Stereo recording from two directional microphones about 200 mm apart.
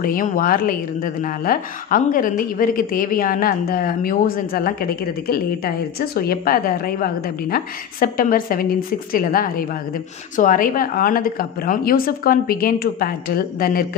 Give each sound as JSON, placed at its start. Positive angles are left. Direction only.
{"t": 0.0, "sound": "a woman's voice", "side_deg": 45}